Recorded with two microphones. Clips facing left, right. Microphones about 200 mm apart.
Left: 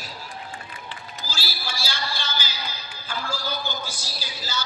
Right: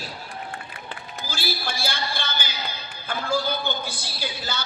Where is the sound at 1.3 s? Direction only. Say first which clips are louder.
Right 6 dB; 55° right (ahead or behind).